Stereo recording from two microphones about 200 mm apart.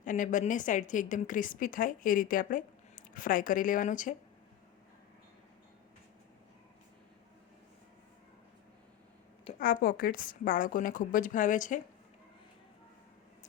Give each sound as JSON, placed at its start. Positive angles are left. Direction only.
{"t": 0.0, "sound": "a woman's voice", "side_deg": 40}
{"t": 9.6, "sound": "a woman's voice", "side_deg": 45}